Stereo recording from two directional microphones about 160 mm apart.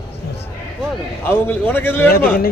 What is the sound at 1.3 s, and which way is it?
Speech, 10° left (ahead or behind).